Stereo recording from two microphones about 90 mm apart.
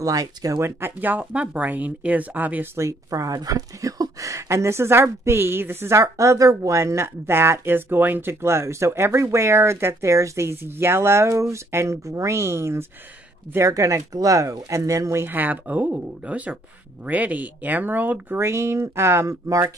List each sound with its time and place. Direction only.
0.0 s speech: 40° right (ahead or behind)
15.2 s speech: 20° right (ahead or behind); by 19.7 s 35° right (ahead or behind)